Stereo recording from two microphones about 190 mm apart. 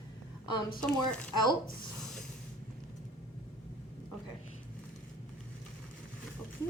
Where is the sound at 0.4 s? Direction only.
25° left (ahead or behind).